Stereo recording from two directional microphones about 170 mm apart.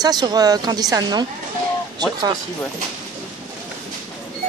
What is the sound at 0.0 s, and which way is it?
A woman's voice, 25° right (ahead or behind).